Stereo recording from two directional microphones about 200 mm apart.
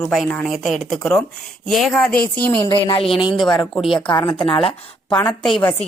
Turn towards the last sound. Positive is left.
turn(degrees=5)  # may be behind; listen again after turning